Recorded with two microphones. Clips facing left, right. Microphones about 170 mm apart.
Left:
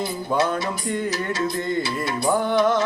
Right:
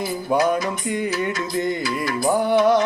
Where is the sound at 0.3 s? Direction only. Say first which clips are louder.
Right 4 dB; 15° right (ahead or behind).